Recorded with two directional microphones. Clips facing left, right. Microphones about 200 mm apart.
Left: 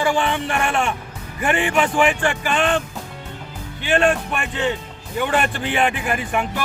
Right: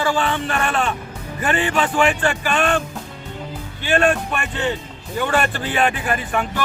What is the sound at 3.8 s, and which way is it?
A man's voice, 15° left (ahead or behind).